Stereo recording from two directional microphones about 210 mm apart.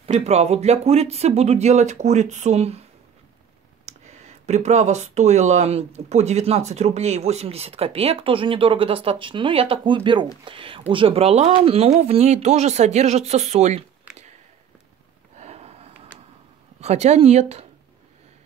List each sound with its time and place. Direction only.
0.0 s speech: 30° right (ahead or behind)
3.8 s speech: 35° right (ahead or behind)
15.3 s sniff: 30° right (ahead or behind)
16.8 s speech: 30° right (ahead or behind)